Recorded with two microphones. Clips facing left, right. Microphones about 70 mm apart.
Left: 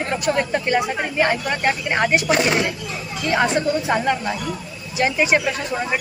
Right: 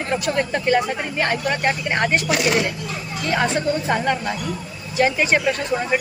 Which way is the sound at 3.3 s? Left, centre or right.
Centre.